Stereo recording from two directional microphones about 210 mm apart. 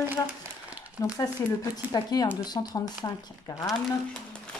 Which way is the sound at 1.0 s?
15° left (ahead or behind).